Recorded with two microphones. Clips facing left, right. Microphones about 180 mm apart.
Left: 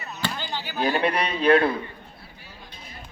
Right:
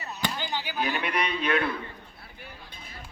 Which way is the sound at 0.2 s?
15° right (ahead or behind).